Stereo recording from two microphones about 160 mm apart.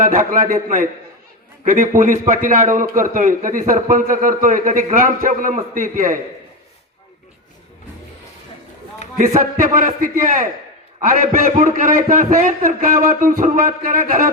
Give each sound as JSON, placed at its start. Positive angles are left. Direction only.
{"t": 0.0, "sound": "a man's voice", "side_deg": -60}
{"t": 9.6, "sound": "a man's voice", "side_deg": -60}